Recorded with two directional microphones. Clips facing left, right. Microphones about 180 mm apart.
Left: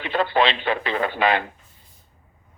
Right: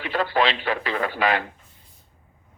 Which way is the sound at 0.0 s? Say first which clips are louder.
Left 2 dB; 25° left (ahead or behind).